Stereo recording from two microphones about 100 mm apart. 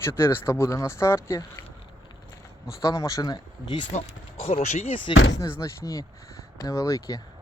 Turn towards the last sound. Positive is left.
turn(degrees=35)  # may be behind; listen again after turning